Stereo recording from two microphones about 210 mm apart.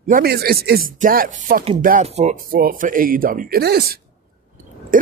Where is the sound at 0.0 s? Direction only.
45° right (ahead or behind).